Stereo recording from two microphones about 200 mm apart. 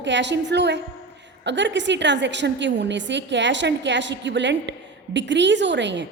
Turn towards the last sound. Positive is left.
turn(degrees=-60)  # may be behind; listen again after turning